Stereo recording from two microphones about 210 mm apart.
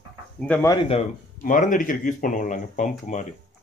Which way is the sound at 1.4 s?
40° left (ahead or behind).